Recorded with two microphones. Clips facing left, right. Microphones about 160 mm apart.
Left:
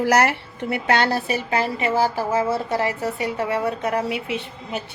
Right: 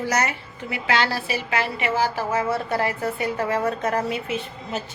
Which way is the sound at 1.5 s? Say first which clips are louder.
Left 1 dB; 35° left (ahead or behind).